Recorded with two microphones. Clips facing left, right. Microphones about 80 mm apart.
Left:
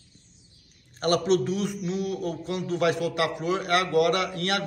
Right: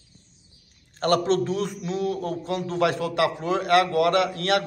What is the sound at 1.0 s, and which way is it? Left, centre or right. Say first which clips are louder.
A man's voice: right 1 dB; right.